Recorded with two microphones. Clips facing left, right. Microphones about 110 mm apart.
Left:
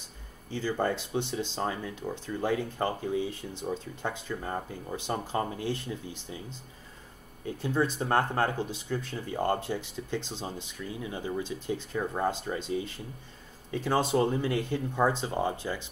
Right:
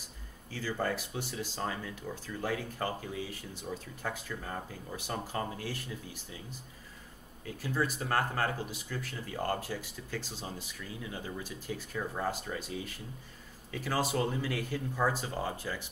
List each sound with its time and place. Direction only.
0.5 s speech: 25° left (ahead or behind)
7.4 s speech: 25° left (ahead or behind)